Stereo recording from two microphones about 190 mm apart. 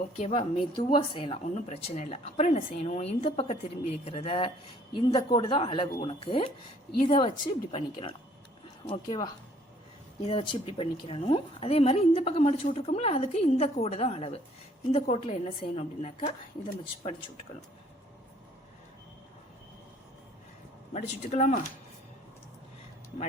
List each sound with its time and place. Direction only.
0.2 s a woman's voice: 35° left (ahead or behind)
20.9 s a woman's voice: 40° left (ahead or behind)